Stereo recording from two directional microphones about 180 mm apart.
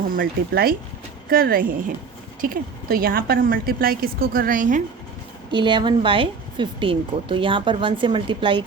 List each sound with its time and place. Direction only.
0.2 s a woman's voice: 55° right (ahead or behind)
5.5 s speech: 25° right (ahead or behind)